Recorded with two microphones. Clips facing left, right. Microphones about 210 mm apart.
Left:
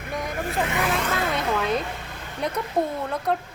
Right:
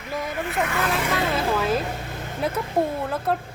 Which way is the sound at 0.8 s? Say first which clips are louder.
Right 2 dB; centre (ahead or behind).